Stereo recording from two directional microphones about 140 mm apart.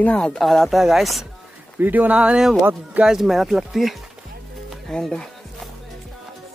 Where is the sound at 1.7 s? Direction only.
15° right (ahead or behind).